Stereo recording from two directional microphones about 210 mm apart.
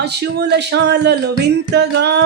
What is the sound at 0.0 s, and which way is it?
Music, 50° right (ahead or behind).